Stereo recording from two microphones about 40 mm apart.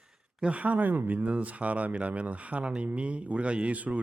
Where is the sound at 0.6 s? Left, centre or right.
Right.